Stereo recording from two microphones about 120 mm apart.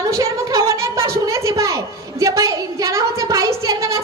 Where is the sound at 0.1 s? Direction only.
25° right (ahead or behind).